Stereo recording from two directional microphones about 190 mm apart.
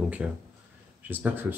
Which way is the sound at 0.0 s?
5° right (ahead or behind).